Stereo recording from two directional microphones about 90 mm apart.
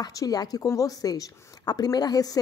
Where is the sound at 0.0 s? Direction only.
45° left (ahead or behind).